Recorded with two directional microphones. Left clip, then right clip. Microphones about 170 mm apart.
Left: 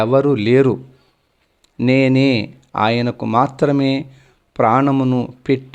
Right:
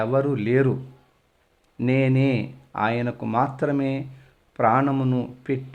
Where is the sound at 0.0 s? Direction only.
30° left (ahead or behind).